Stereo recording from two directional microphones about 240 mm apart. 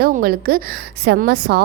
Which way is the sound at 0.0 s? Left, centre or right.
Right.